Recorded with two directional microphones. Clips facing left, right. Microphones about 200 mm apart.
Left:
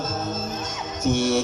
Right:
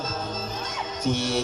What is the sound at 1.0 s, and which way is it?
Music, 50° left (ahead or behind).